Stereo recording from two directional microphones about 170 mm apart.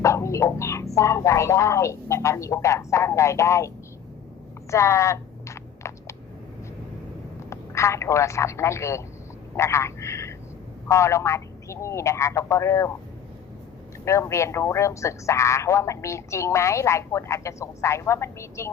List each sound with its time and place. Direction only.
0.0 s speech: 15° left (ahead or behind)
4.7 s computer keyboard: 15° left (ahead or behind)
7.5 s speech: 15° left (ahead or behind)
14.0 s speech: 15° left (ahead or behind)